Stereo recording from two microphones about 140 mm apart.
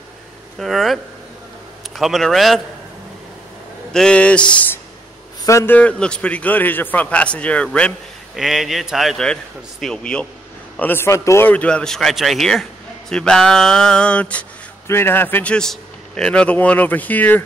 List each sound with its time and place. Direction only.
0.6 s a man's voice: centre (ahead or behind)
2.0 s a man's voice: centre (ahead or behind)
3.9 s a man's voice: 5° left (ahead or behind)
5.4 s a man's voice: 20° left (ahead or behind)
5.8 s a man's voice: 10° left (ahead or behind)
8.4 s a man's voice: centre (ahead or behind)
10.8 s a man's voice: 15° left (ahead or behind)